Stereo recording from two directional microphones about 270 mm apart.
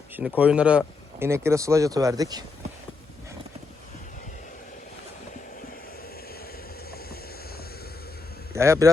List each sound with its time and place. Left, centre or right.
0.2 s speech: centre
6.9 s vehicle: left
8.5 s a man's voice: centre